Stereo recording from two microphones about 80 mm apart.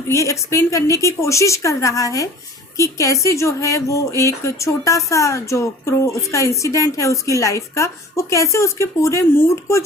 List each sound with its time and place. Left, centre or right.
0.1 s a woman's voice: left